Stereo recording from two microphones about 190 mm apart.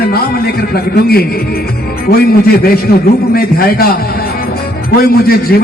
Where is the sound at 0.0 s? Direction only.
55° left (ahead or behind).